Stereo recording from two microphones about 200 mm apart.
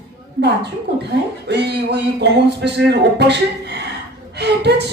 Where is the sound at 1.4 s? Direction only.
55° right (ahead or behind).